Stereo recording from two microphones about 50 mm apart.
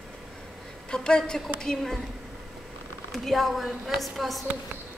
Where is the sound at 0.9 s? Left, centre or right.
Centre.